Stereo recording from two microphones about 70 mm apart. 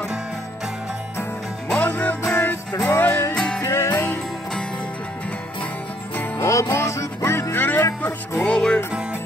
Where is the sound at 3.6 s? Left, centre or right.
Left.